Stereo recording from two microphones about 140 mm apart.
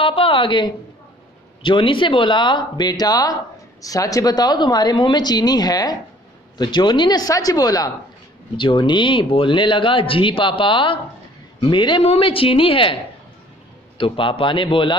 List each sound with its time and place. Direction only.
0.0 s a woman's voice: 40° left (ahead or behind)
13.9 s speech: 40° left (ahead or behind)